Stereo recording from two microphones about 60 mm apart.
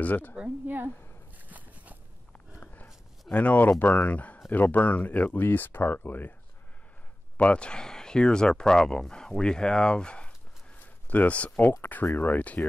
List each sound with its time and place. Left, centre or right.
0.0 s speech: left
0.7 s speech: right
1.5 s a sound: right
2.6 s dog: left
3.3 s speech: left
7.3 s speech: centre